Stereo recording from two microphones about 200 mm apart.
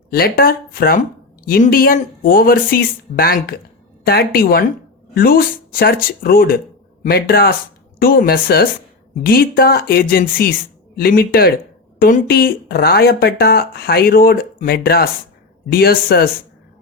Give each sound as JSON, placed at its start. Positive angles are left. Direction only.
{"t": 0.1, "sound": "speech", "side_deg": 50}